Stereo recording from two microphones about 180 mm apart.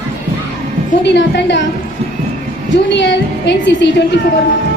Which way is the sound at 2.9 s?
80° left.